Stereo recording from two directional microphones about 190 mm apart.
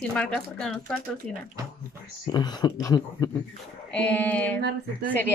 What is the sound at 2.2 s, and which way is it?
Speech, 20° left (ahead or behind).